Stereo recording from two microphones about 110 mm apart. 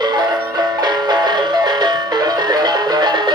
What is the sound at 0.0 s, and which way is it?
Music, 40° right (ahead or behind).